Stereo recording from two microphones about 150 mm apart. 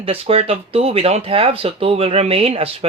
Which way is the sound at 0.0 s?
40° right (ahead or behind).